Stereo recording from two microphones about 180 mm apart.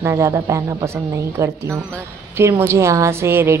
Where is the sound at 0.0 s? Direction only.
15° right (ahead or behind).